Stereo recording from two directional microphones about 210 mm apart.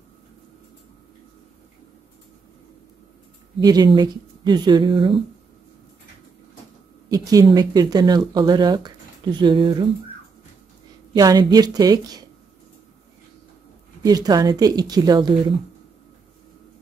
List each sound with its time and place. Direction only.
3.6 s speech: 20° right (ahead or behind)
7.1 s speech: 15° right (ahead or behind)
11.1 s a woman's voice: 20° right (ahead or behind)
14.0 s speech: 20° right (ahead or behind)